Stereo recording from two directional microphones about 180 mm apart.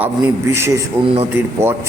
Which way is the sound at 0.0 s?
15° right (ahead or behind).